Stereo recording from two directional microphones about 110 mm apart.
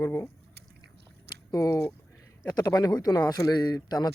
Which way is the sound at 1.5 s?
30° left (ahead or behind).